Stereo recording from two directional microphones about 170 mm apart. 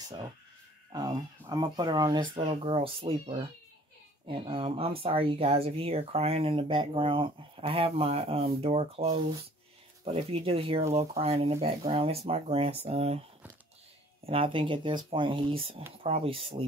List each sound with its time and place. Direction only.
0.9 s speech: 25° right (ahead or behind)
14.2 s speech: 30° right (ahead or behind)